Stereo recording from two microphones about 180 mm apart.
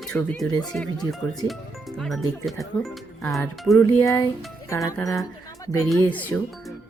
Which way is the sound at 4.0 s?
15° left (ahead or behind).